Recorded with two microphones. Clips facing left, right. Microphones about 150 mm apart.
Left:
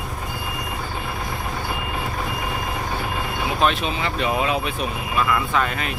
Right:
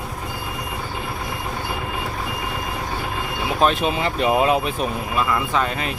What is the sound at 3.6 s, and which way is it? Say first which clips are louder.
Speech: right 3 dB; 45° right (ahead or behind).